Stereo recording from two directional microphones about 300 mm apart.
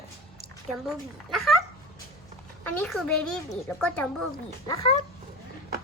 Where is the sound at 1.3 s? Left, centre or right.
Centre.